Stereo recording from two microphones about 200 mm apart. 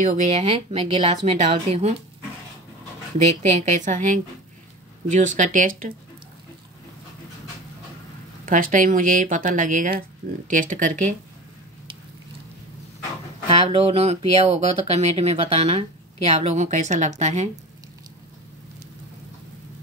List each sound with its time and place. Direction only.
0.0 s speech: 35° right (ahead or behind)
3.3 s speech: 35° right (ahead or behind)
8.5 s speech: 45° right (ahead or behind)
13.5 s speech: 30° right (ahead or behind)